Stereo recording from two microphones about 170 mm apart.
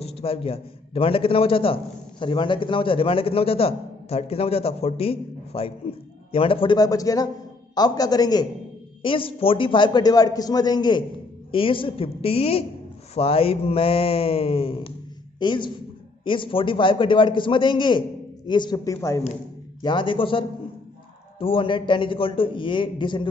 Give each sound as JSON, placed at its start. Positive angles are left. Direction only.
{"t": 0.0, "sound": "a man's voice", "side_deg": 35}